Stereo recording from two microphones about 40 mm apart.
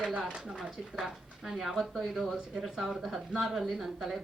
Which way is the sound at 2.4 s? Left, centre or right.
Centre.